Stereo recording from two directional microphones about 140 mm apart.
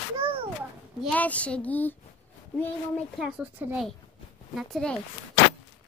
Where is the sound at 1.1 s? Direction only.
10° left (ahead or behind).